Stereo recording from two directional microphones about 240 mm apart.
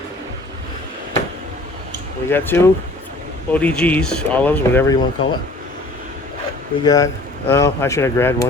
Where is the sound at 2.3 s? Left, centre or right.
Centre.